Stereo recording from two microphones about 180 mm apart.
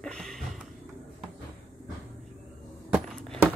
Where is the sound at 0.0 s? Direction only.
5° left (ahead or behind).